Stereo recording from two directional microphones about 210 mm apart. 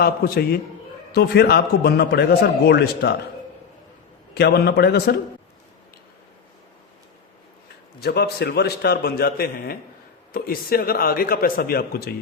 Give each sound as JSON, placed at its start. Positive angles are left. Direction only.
{"t": 0.0, "sound": "a man's voice", "side_deg": 45}
{"t": 4.4, "sound": "a man's voice", "side_deg": 50}
{"t": 8.0, "sound": "a man's voice", "side_deg": 50}